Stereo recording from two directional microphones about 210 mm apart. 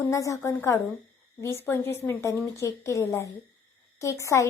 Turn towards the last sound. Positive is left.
turn(degrees=15)  # may be behind; listen again after turning